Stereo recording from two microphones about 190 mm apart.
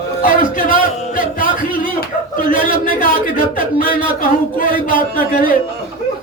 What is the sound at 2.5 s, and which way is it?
A man's voice, 45° left (ahead or behind).